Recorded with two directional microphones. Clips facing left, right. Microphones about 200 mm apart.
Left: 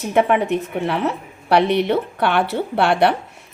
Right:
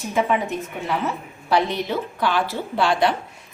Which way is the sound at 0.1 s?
65° left (ahead or behind).